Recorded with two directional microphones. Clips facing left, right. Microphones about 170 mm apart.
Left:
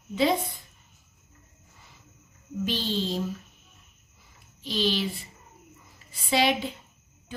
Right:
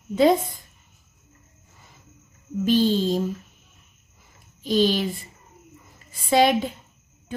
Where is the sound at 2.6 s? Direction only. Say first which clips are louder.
Right 10 dB; 45° right (ahead or behind).